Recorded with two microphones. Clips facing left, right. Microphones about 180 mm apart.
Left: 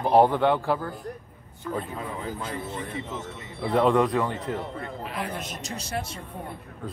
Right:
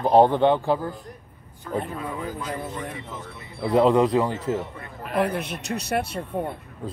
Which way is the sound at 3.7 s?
25° right (ahead or behind).